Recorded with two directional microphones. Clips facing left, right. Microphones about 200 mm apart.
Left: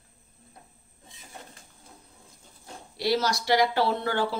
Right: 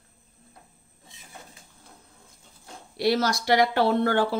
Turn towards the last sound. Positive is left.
turn(degrees=-55)  # may be behind; listen again after turning